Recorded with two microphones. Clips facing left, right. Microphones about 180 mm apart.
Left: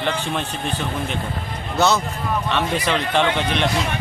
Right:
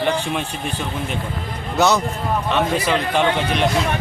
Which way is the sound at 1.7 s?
15° right (ahead or behind).